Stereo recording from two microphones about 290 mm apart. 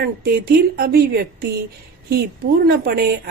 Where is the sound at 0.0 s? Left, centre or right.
Right.